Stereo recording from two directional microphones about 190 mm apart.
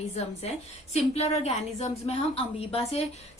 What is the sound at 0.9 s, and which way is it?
A woman's voice, 35° left (ahead or behind).